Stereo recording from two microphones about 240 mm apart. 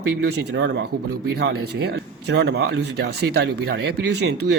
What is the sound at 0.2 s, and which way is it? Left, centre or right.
Speech, right.